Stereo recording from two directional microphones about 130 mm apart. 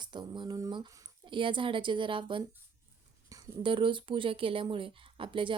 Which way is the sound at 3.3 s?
25° right (ahead or behind).